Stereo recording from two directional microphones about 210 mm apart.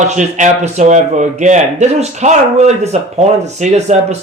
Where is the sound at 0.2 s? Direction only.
35° right (ahead or behind).